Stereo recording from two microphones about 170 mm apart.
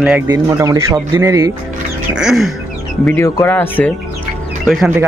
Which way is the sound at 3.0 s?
15° left (ahead or behind).